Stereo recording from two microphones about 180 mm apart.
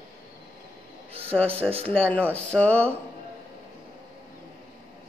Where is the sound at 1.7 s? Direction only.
35° right (ahead or behind).